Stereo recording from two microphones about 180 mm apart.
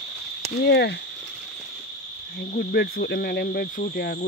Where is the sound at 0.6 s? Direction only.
70° left (ahead or behind).